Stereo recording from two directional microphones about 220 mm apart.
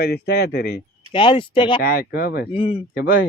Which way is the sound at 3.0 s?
40° left (ahead or behind).